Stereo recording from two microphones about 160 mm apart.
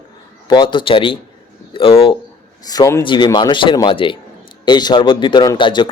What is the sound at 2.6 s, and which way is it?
A man's voice, 25° left (ahead or behind).